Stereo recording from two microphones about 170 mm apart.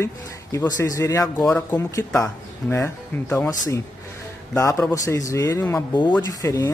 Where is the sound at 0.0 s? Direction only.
15° left (ahead or behind).